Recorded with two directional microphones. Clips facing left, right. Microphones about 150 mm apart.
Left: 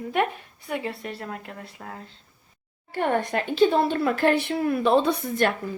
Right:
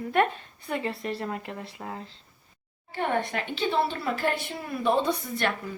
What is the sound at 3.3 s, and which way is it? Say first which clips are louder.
Speech: left 8 dB; 45° left (ahead or behind).